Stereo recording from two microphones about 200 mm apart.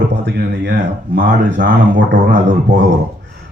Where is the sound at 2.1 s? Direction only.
40° right (ahead or behind).